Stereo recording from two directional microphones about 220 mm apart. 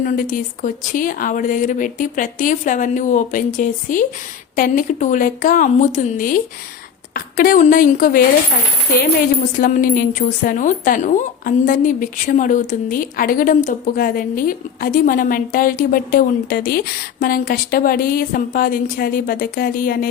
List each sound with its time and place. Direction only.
0.0 s speech: 40° left (ahead or behind)
9.6 s speech: 40° left (ahead or behind)